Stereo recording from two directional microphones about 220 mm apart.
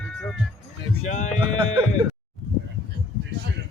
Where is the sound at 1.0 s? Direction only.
35° left (ahead or behind).